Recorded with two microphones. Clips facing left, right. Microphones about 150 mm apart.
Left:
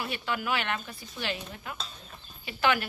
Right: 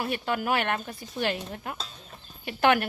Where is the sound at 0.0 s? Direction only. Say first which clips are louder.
Right 4 dB; 45° right (ahead or behind).